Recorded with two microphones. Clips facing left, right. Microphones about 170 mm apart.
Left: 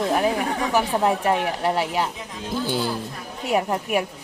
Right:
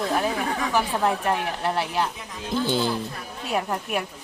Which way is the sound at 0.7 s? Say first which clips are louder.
Left 3 dB; 10° left (ahead or behind).